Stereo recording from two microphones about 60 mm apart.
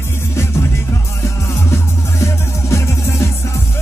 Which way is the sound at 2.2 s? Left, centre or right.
Left.